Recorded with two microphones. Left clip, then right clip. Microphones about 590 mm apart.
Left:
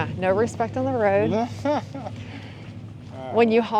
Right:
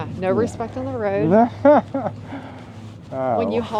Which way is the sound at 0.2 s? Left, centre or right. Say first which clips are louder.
Right 1 dB; centre.